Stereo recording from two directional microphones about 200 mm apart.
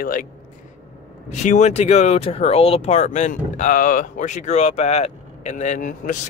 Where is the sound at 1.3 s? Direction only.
35° left (ahead or behind).